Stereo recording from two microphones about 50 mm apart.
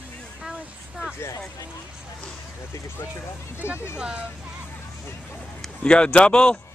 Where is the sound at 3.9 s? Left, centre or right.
Centre.